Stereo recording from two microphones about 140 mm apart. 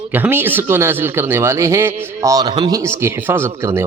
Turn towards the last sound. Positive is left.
turn(degrees=-20)  # may be behind; listen again after turning